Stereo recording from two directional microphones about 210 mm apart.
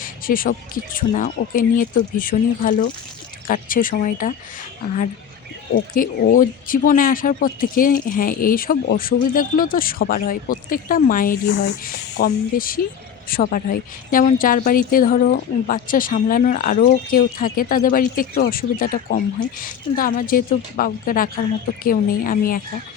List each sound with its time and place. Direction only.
0.0 s a woman's voice: 40° left (ahead or behind)
5.9 s a woman's voice: 40° left (ahead or behind)